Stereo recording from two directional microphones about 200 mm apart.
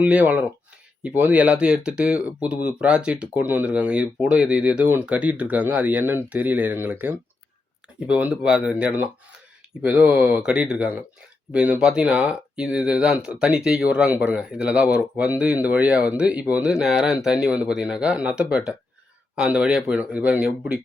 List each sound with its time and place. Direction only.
0.0 s speech: 5° right (ahead or behind)